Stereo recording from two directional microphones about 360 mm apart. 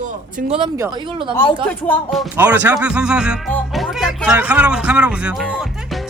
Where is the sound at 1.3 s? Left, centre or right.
Centre.